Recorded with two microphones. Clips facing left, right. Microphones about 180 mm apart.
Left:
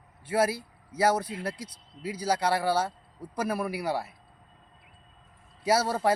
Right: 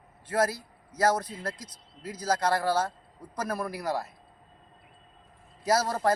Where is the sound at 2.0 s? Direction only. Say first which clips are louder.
Even; 10° left (ahead or behind).